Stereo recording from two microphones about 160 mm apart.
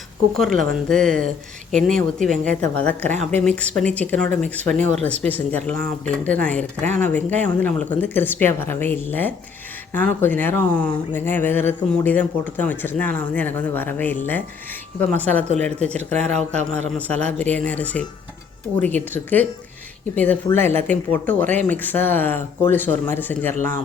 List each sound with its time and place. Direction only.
0.3 s speech: centre (ahead or behind)
16.3 s a man's voice: 45° right (ahead or behind)
17.1 s speech: 5° left (ahead or behind)